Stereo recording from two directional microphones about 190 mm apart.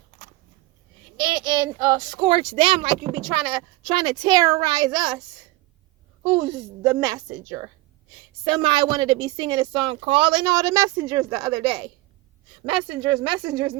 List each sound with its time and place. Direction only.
1.1 s speech: 25° right (ahead or behind)
6.8 s a woman's voice: 15° right (ahead or behind)